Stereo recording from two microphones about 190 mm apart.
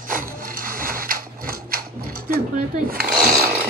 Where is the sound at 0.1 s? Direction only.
45° right (ahead or behind).